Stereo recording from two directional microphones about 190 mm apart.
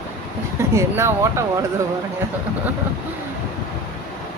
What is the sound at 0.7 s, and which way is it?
Speech, 15° right (ahead or behind).